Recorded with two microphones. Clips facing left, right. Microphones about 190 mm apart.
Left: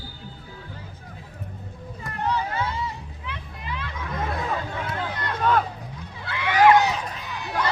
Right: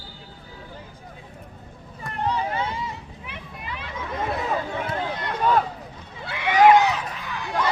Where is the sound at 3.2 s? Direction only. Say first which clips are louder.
Left 2 dB; 15° right (ahead or behind).